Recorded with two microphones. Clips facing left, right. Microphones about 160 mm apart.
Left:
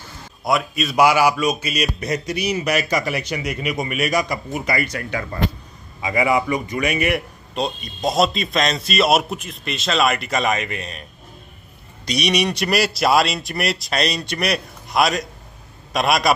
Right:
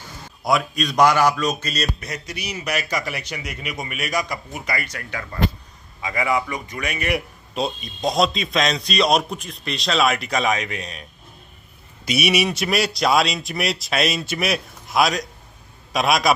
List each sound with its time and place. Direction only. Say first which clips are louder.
0.4 s a man's voice: even; centre (ahead or behind); by 2.2 s 20° left (ahead or behind)
3.1 s speech: left 6 dB; 60° left (ahead or behind)
3.9 s a man's voice: left 3 dB; 10° left (ahead or behind)